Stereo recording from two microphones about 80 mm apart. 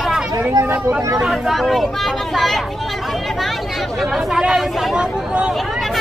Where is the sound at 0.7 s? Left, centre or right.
Right.